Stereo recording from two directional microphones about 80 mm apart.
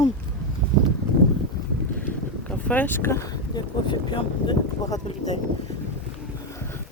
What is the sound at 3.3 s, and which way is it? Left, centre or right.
Speech, left.